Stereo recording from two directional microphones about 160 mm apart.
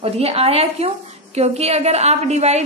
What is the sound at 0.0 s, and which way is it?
A woman's voice, 40° right (ahead or behind).